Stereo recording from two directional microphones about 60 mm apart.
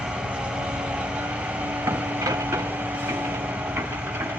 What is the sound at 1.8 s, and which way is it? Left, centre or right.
Vehicle, right.